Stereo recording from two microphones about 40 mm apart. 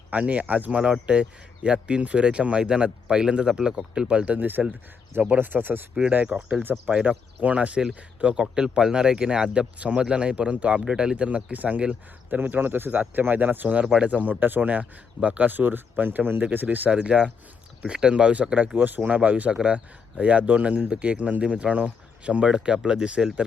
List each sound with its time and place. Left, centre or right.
0.1 s speech: right
0.7 s speech: right
4.4 s speech: right
6.2 s speech: right
8.4 s speech: centre
9.5 s speech: right
10.8 s speech: right
11.5 s speech: right
12.9 s speech: right
13.2 s speech: right
16.4 s speech: right
16.6 s speech: right
17.0 s speech: right
18.8 s speech: right